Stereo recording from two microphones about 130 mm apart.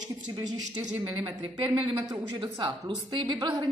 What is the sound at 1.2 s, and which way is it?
A woman's voice, 40° right (ahead or behind).